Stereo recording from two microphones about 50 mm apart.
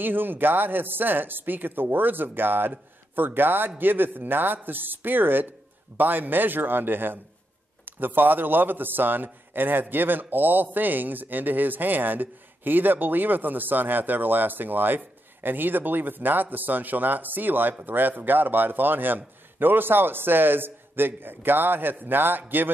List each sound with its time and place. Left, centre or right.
0.0 s a man's voice: right